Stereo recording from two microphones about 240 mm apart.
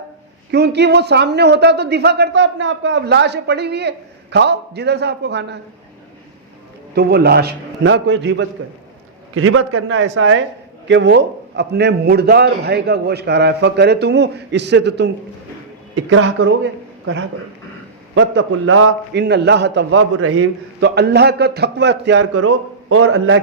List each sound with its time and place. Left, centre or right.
0.5 s a man's voice: right
6.9 s a man's voice: right
9.3 s a man's voice: right
18.1 s a man's voice: right
20.0 s a man's voice: right
20.8 s a man's voice: right
22.4 s a man's voice: right